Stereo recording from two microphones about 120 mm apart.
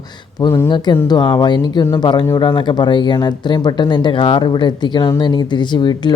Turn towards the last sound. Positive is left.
turn(degrees=40)  # may be behind; listen again after turning